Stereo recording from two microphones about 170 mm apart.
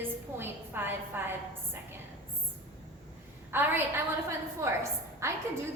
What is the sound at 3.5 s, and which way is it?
A woman's voice, 10° right (ahead or behind).